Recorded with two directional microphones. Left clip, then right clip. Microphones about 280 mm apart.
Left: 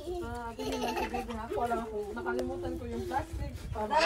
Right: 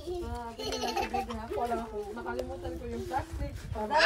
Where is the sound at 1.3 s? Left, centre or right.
Right.